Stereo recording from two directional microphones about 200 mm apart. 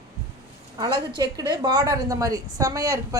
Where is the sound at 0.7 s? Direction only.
20° right (ahead or behind).